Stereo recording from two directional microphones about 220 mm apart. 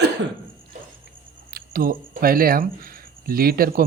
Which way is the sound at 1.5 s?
40° right (ahead or behind).